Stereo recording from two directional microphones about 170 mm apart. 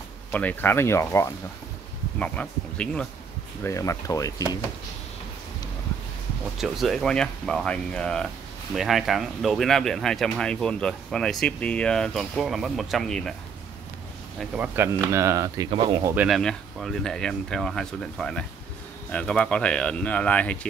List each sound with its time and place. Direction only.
0.3 s speech: 10° left (ahead or behind)
3.6 s speech: 15° left (ahead or behind)
6.6 s speech: centre (ahead or behind)
14.4 s speech: 5° right (ahead or behind)
15.1 s speech: 15° right (ahead or behind)
16.2 s speech: centre (ahead or behind)